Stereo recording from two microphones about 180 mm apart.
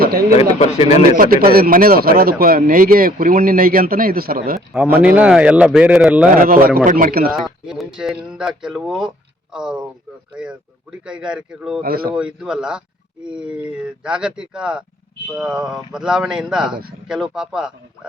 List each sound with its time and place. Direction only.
0.0 s bird: 55° right (ahead or behind)
0.3 s speech: 40° left (ahead or behind)
1.1 s speech: 55° right (ahead or behind)
4.7 s speech: 5° right (ahead or behind)
6.3 s speech: 50° right (ahead or behind)
7.3 s speech: centre (ahead or behind)
11.8 s speech: 55° right (ahead or behind)
12.1 s speech: 5° right (ahead or behind)